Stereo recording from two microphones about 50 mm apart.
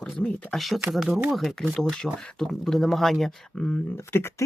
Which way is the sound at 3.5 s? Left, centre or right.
Left.